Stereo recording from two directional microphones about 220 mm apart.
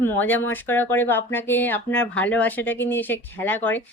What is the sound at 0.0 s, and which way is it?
Speech, 10° left (ahead or behind).